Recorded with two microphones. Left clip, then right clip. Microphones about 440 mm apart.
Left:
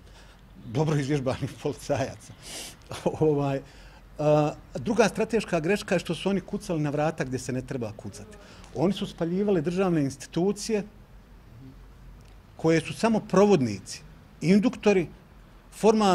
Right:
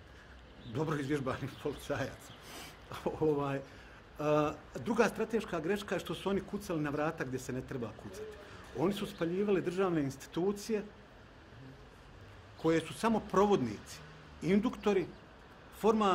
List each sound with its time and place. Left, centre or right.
0.7 s speech: left
12.6 s a man's voice: left